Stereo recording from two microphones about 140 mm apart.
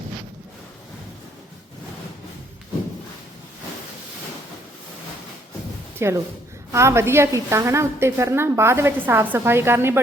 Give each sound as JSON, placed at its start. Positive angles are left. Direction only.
{"t": 6.0, "sound": "a woman's voice", "side_deg": -20}